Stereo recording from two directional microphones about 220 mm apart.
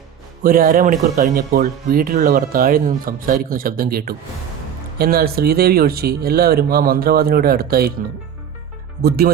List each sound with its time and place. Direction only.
0.4 s speech: 40° right (ahead or behind)
9.0 s speech: 45° right (ahead or behind)